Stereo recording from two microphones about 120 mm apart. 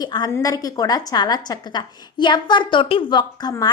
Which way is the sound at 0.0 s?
35° left (ahead or behind).